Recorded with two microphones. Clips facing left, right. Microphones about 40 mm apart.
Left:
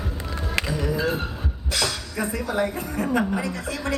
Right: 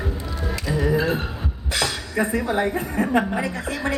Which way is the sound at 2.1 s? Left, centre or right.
Right.